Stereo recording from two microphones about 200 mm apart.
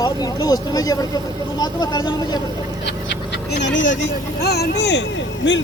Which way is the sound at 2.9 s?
60° left (ahead or behind).